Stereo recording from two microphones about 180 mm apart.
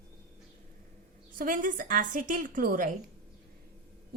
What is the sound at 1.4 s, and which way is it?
A woman's voice, 50° right (ahead or behind).